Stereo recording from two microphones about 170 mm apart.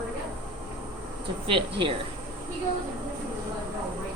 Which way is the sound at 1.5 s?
30° right (ahead or behind).